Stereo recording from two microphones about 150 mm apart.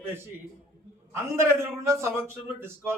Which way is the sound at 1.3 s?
15° right (ahead or behind).